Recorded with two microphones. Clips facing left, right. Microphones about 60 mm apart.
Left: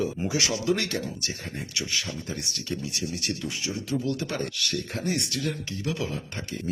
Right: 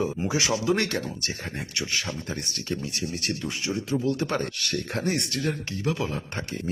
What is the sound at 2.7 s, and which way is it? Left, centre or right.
Speech, right.